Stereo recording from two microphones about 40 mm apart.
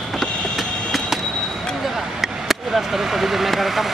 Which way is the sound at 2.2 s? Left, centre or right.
Centre.